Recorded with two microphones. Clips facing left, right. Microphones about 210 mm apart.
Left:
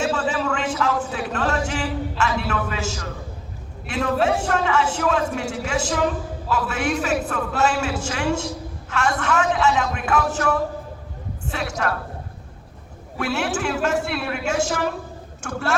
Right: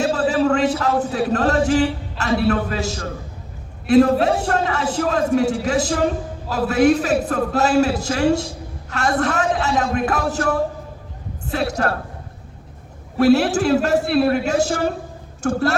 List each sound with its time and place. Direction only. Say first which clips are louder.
0.0 s a sound: right 5 dB; 35° right (ahead or behind)
3.8 s a man's voice: right 8 dB; 35° right (ahead or behind)
13.1 s a man's voice: right 10 dB; 35° right (ahead or behind)